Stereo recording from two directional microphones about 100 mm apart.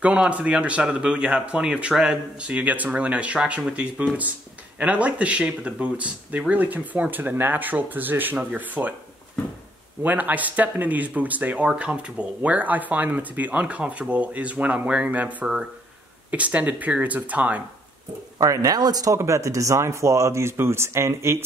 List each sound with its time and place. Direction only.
0.0 s speech: 10° right (ahead or behind)
10.0 s speech: 15° right (ahead or behind)
18.4 s speech: 35° right (ahead or behind)